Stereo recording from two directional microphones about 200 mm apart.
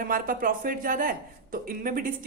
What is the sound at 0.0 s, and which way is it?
Speech, 45° right (ahead or behind).